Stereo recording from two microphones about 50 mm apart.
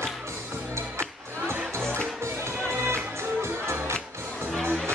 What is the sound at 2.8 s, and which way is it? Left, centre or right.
Music, right.